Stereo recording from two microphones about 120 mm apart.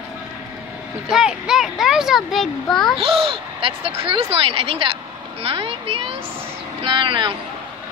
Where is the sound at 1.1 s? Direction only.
5° right (ahead or behind).